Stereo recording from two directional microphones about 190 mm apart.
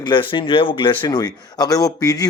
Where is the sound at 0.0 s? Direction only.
25° left (ahead or behind).